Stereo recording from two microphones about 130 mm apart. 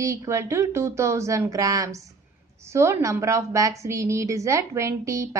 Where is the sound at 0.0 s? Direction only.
25° right (ahead or behind).